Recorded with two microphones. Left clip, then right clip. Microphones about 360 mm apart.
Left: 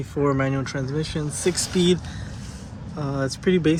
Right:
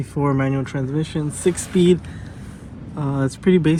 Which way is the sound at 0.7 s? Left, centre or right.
Right.